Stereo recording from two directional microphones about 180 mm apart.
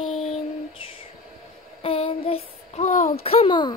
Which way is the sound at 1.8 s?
30° left (ahead or behind).